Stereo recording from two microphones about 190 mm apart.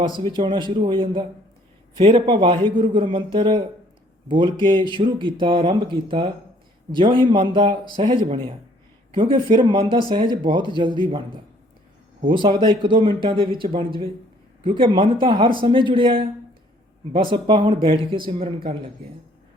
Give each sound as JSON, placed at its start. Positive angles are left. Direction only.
{"t": 0.2, "sound": "speech", "side_deg": -25}
{"t": 12.4, "sound": "speech", "side_deg": -25}